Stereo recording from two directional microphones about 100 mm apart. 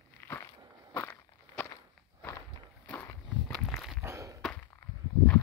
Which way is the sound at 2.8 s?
10° left (ahead or behind).